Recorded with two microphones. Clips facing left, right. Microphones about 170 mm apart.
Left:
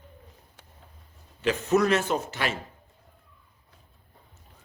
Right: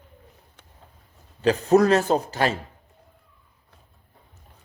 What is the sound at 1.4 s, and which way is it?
Speech, 35° right (ahead or behind).